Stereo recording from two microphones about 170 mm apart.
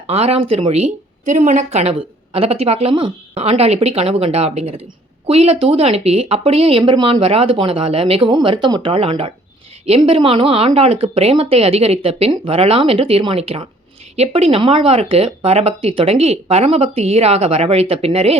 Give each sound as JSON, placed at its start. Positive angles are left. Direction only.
{"t": 0.1, "sound": "speech", "side_deg": -35}